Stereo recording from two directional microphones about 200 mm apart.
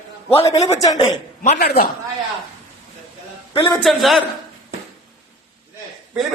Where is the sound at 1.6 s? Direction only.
55° left (ahead or behind).